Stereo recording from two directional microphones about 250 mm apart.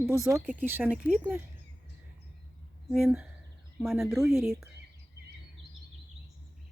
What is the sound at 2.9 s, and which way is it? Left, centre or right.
Speech, centre.